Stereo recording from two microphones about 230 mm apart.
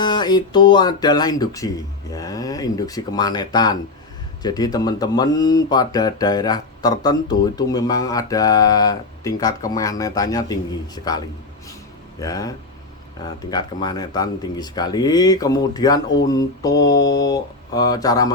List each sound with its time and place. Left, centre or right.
0.0 s speech: centre
12.2 s speech: centre